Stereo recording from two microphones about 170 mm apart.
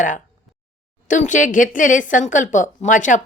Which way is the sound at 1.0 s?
50° left (ahead or behind).